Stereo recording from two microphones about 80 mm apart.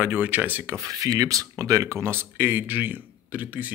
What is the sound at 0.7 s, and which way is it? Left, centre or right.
Speech, right.